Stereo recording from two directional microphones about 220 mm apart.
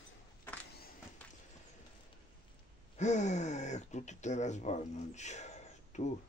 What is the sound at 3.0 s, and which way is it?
Speech, 30° left (ahead or behind).